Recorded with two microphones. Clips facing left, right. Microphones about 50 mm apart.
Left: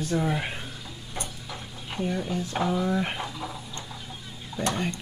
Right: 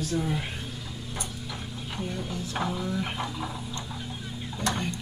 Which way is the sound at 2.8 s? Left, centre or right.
Left.